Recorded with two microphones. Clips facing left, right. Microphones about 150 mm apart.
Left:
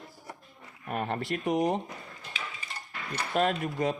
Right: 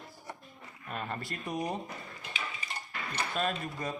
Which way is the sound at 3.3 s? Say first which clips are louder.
Left 7 dB; 75° left (ahead or behind).